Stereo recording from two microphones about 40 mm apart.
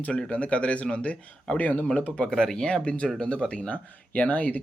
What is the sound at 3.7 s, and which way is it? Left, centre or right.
Speech, left.